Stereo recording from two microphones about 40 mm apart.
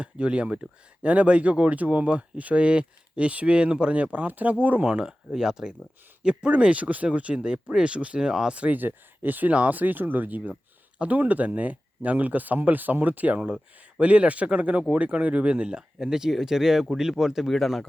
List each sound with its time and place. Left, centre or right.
0.0 s speech: right
4.3 s speech: right
4.8 s speech: right
6.2 s speech: right
8.7 s speech: right
9.5 s speech: right
16.0 s speech: centre
17.4 s speech: centre